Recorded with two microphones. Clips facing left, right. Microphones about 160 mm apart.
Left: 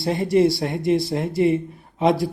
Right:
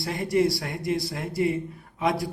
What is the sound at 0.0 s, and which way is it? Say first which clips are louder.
Speech: left 6 dB; 25° left (ahead or behind).